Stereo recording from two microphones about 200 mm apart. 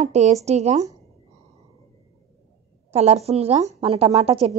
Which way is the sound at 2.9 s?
30° right (ahead or behind).